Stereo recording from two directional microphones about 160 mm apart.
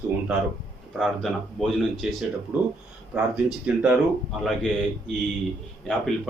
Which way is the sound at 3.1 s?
5° right (ahead or behind).